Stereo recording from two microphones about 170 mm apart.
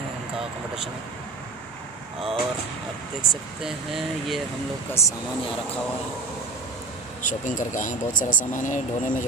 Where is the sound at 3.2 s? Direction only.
Centre (ahead or behind).